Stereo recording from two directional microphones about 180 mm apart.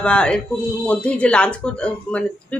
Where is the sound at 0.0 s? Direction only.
5° left (ahead or behind).